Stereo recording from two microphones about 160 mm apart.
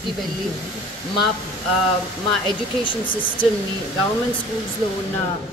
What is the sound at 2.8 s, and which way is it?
Speech, 30° left (ahead or behind).